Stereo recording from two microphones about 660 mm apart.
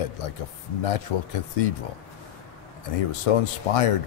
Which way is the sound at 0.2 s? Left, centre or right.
Left.